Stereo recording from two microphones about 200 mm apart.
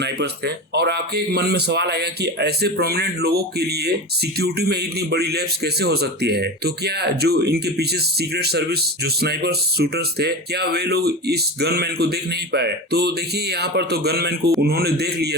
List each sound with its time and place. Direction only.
0.0 s a man's voice: 55° right (ahead or behind)